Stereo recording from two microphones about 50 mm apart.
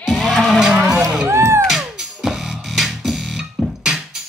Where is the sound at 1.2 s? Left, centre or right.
Right.